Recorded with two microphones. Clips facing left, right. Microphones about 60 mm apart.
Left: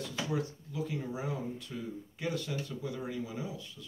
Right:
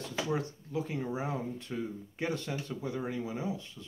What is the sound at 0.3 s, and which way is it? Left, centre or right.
Speech, right.